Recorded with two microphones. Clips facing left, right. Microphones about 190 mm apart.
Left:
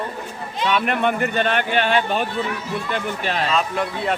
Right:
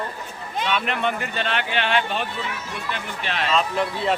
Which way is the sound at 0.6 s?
50° left (ahead or behind).